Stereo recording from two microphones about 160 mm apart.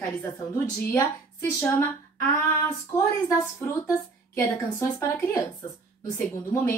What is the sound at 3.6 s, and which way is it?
A woman's voice, 15° left (ahead or behind).